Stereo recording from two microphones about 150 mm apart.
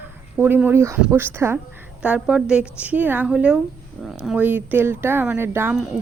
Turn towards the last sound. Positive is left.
turn(degrees=-15)  # may be behind; listen again after turning